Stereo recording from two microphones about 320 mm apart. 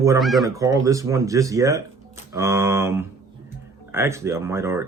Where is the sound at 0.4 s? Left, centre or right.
Centre.